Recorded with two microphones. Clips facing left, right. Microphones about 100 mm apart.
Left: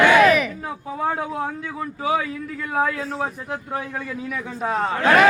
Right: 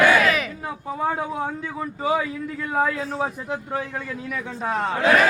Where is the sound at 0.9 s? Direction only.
5° right (ahead or behind).